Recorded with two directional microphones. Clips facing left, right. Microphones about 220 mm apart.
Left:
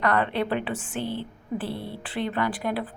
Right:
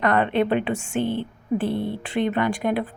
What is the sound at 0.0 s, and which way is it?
A woman's voice, 20° right (ahead or behind).